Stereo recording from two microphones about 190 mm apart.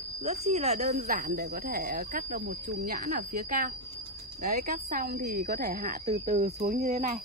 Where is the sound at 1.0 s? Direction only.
50° right (ahead or behind).